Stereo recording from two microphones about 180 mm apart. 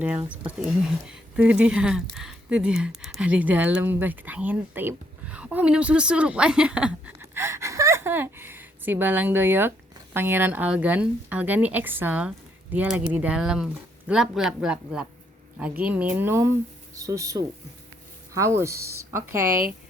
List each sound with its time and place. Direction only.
0.0 s speech: 10° right (ahead or behind)